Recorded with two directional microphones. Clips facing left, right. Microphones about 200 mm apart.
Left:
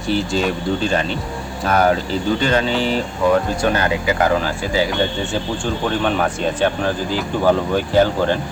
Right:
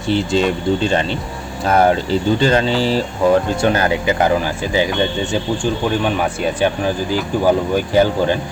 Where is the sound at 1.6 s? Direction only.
30° right (ahead or behind).